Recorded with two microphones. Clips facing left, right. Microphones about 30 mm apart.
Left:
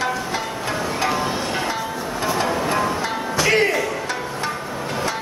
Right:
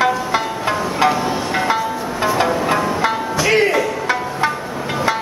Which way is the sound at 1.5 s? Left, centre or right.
Centre.